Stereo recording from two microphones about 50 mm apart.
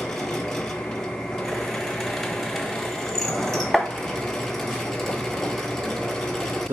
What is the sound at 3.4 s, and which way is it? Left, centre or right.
Chopping, centre.